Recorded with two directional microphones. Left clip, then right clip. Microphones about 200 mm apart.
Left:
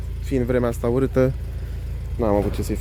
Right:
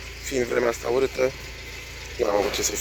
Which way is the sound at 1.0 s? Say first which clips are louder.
Left 4 dB; 25° left (ahead or behind).